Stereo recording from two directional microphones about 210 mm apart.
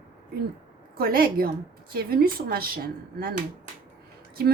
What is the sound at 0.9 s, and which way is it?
A woman's voice, 45° right (ahead or behind).